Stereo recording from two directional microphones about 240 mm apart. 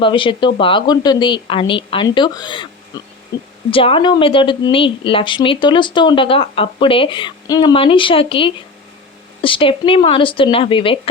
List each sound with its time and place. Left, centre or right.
0.0 s a woman's voice: left